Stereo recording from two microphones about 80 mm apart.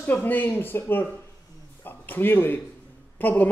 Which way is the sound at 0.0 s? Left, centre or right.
Left.